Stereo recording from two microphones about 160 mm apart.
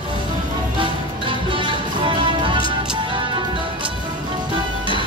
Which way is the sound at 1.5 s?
30° right (ahead or behind).